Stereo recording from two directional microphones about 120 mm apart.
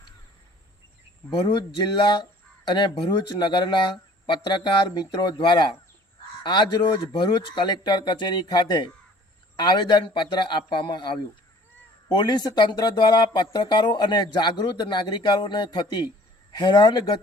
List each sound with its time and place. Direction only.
1.3 s speech: 45° left (ahead or behind)